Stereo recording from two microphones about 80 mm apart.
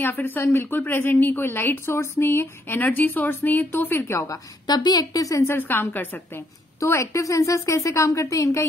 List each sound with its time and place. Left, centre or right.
0.0 s a woman's voice: left
4.0 s speech: left
4.6 s a woman's voice: left
5.5 s a woman's voice: left
6.8 s speech: left